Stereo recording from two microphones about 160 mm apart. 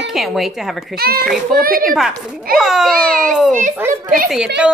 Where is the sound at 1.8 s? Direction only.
Centre (ahead or behind).